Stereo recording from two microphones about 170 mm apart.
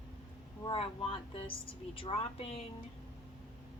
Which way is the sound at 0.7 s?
35° left (ahead or behind).